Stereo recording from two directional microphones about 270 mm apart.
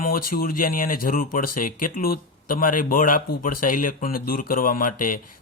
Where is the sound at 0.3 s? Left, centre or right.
Left.